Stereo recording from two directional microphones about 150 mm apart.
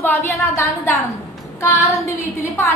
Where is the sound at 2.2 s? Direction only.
20° left (ahead or behind).